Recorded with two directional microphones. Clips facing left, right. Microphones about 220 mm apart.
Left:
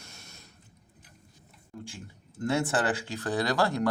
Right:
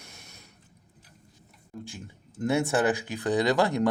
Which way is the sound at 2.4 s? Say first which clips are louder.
Right 3 dB; 15° right (ahead or behind).